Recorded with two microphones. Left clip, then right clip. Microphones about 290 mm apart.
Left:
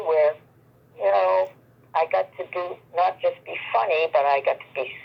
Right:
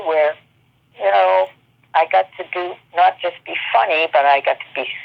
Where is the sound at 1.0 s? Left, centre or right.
Centre.